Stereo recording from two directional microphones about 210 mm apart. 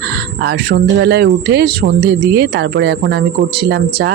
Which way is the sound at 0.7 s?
50° right (ahead or behind).